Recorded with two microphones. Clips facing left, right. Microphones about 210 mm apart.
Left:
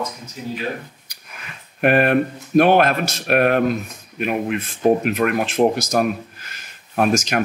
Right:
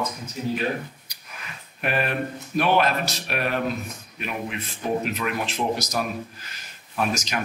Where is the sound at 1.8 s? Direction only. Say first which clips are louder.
Left 10 dB; 60° left (ahead or behind).